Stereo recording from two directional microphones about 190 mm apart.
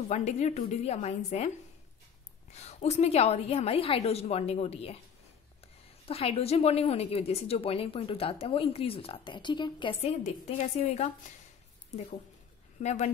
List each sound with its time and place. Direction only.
0.1 s a woman's voice: 35° left (ahead or behind)
2.5 s a woman's voice: 35° left (ahead or behind)
6.0 s a woman's voice: 30° left (ahead or behind)
12.8 s a woman's voice: 35° left (ahead or behind)